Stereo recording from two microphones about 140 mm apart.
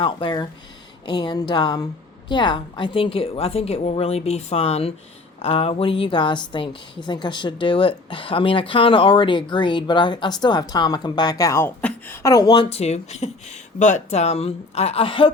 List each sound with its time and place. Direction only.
0.0 s a woman's voice: 35° left (ahead or behind)
12.6 s a woman's voice: 50° left (ahead or behind)